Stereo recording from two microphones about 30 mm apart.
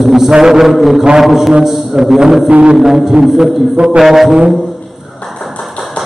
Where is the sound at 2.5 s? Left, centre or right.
Right.